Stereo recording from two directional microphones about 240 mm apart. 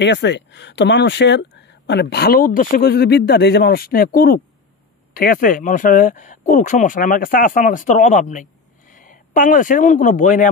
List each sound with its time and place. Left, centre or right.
0.0 s speech: left